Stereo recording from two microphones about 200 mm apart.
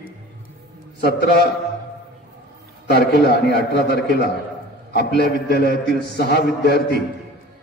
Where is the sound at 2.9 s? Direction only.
50° left (ahead or behind).